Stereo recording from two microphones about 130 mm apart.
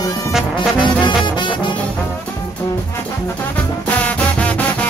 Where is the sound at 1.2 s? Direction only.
40° left (ahead or behind).